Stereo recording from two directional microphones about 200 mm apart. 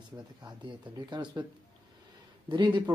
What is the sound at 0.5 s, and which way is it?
Speech, 25° right (ahead or behind).